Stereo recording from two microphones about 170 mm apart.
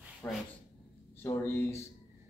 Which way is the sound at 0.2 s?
15° left (ahead or behind).